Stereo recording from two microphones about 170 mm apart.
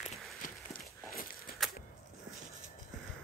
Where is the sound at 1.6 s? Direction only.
Centre (ahead or behind).